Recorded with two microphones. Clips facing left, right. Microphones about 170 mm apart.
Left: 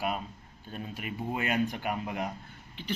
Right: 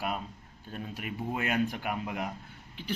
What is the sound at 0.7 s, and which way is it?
A man's voice, centre (ahead or behind).